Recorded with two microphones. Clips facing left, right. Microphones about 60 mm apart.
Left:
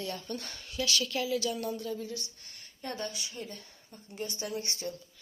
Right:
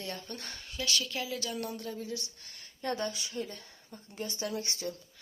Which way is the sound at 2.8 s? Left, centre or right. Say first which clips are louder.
Right 4 dB; right.